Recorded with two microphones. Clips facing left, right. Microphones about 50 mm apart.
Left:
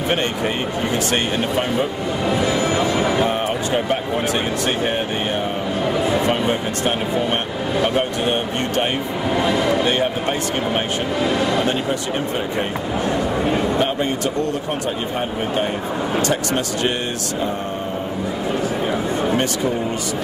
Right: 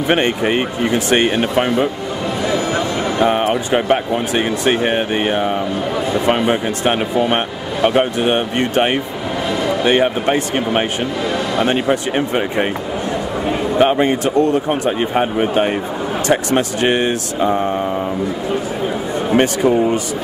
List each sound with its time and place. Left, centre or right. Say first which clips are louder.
0.9 s speech: right 7 dB; right
2.2 s speech: even; centre
3.3 s speech: right 5 dB; right
9.5 s speech: right 2 dB; centre
9.8 s speech: right 5 dB; right
13.7 s speech: right 6 dB; right
19.3 s speech: right 6 dB; right